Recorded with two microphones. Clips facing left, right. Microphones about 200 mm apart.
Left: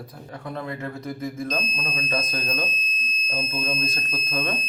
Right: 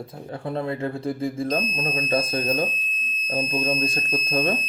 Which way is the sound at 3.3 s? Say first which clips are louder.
Right 5 dB; 15° right (ahead or behind).